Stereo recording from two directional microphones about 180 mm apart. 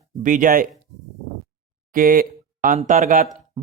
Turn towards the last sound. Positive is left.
turn(degrees=-50)  # may be behind; listen again after turning